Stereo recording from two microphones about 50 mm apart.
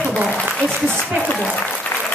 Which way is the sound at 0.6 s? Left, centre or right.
Centre.